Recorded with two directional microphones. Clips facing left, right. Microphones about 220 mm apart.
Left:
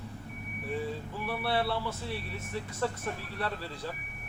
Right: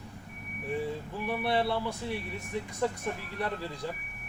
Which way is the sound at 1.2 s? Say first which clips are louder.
Right 2 dB; 15° right (ahead or behind).